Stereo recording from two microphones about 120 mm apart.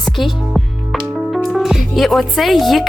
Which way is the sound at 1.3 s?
Centre (ahead or behind).